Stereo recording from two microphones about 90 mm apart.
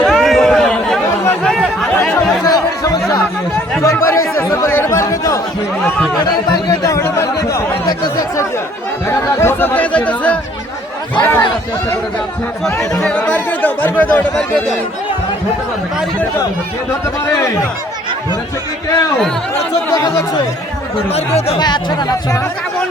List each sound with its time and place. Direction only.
0.0 s a sound: centre (ahead or behind)
1.5 s chatter: 5° left (ahead or behind)
2.4 s chatter: 45° left (ahead or behind)
3.8 s chatter: 35° left (ahead or behind)
6.2 s a sound: 40° left (ahead or behind)
9.0 s chatter: 25° left (ahead or behind)
11.1 s a sound: 20° left (ahead or behind)
13.0 s speech: 10° left (ahead or behind)
21.1 s speech: 90° left
21.6 s speech: 50° left (ahead or behind)